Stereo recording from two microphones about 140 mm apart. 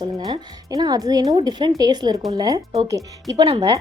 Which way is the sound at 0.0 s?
25° right (ahead or behind).